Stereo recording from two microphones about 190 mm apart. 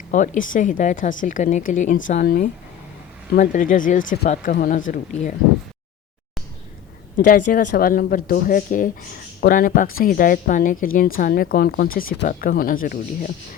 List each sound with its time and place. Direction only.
0.1 s a woman's voice: 40° left (ahead or behind)
7.3 s a woman's voice: 45° left (ahead or behind)